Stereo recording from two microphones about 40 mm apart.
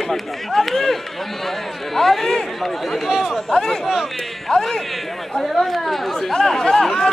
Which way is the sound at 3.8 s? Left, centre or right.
Centre.